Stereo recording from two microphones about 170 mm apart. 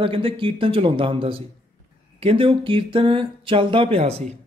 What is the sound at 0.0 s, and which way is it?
A man's voice, 30° right (ahead or behind).